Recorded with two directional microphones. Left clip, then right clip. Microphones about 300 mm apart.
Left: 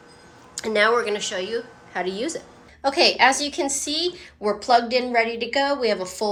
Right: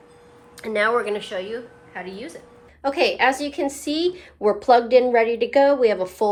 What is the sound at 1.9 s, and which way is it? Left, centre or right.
Speech, centre.